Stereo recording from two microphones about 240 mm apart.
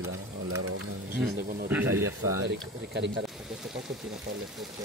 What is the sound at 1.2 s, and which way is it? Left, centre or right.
Speech, right.